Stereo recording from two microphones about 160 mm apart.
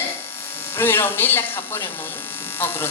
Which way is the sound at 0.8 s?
15° left (ahead or behind).